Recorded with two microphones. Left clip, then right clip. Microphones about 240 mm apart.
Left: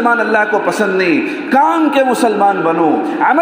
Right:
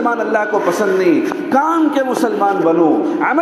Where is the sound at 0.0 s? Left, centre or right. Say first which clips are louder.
Left 4 dB; left.